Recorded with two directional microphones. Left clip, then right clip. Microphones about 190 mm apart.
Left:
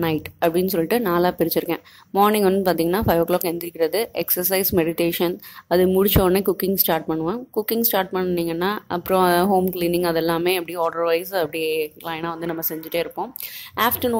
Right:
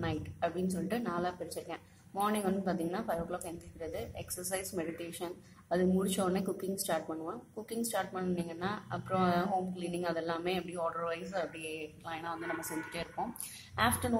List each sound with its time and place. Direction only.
0.0 s a woman's voice: 50° left (ahead or behind)